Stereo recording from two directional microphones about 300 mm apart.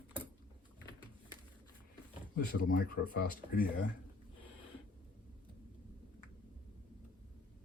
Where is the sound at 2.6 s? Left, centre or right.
Left.